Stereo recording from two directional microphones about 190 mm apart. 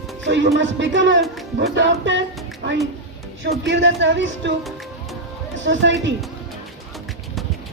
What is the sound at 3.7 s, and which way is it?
Music, 75° right (ahead or behind).